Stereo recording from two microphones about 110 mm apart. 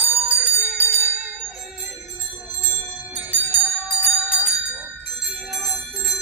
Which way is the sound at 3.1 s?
15° right (ahead or behind).